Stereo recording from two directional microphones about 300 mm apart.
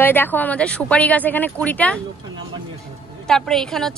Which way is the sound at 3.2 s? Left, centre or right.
Centre.